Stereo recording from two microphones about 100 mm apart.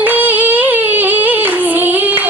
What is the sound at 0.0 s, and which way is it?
Singing, 15° right (ahead or behind).